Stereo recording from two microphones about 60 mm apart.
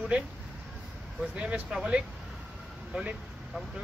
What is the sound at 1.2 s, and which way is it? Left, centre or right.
Speech, right.